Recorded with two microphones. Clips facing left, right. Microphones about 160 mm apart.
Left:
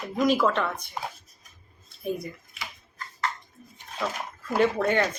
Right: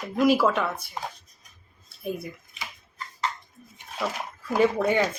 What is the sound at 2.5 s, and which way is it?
Tick-tock, 15° right (ahead or behind).